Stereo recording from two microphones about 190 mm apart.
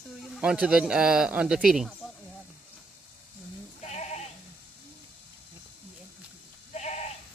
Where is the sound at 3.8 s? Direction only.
35° left (ahead or behind).